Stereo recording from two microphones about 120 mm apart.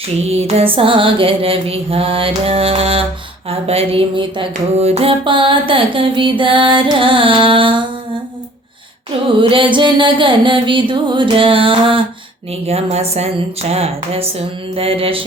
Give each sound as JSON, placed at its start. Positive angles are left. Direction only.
{"t": 0.3, "sound": "music", "side_deg": -60}
{"t": 4.8, "sound": "music", "side_deg": -60}
{"t": 9.4, "sound": "music", "side_deg": -45}
{"t": 12.6, "sound": "speech", "side_deg": -60}